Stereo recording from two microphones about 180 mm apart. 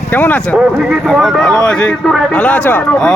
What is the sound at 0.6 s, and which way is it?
A man's voice, 5° right (ahead or behind).